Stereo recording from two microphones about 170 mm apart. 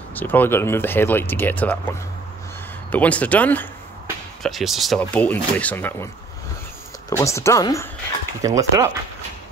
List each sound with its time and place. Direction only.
0.1 s speech: 10° left (ahead or behind)
2.9 s speech: 10° left (ahead or behind)
7.1 s speech: 20° left (ahead or behind)
8.4 s speech: 20° right (ahead or behind)